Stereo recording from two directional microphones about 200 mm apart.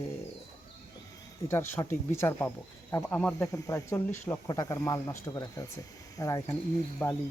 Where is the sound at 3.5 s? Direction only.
15° left (ahead or behind).